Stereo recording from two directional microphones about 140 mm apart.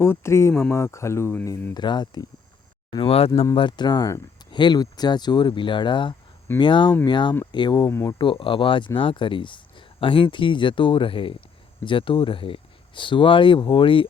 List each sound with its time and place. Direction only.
0.0 s speech: 20° left (ahead or behind)
1.7 s speech: 30° left (ahead or behind)
2.9 s speech: 40° left (ahead or behind)
7.9 s speech: 20° left (ahead or behind)
8.2 s speech: 40° left (ahead or behind)